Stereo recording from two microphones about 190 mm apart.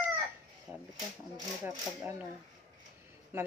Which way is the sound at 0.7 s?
10° right (ahead or behind).